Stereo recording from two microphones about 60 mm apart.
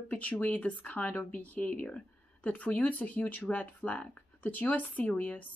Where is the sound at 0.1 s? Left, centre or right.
Left.